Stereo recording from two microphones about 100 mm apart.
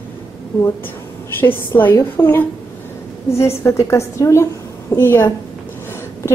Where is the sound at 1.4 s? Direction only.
20° left (ahead or behind).